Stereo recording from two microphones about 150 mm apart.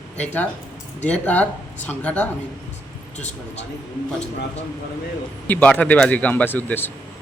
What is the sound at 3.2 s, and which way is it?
Speech, 50° left (ahead or behind).